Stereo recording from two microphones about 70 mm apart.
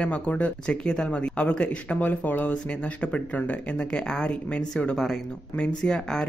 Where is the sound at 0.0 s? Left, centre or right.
Centre.